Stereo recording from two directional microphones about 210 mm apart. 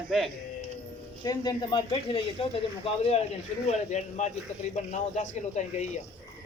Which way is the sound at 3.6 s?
35° left (ahead or behind).